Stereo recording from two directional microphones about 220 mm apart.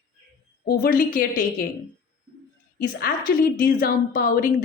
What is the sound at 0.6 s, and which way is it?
A woman's voice, 40° left (ahead or behind).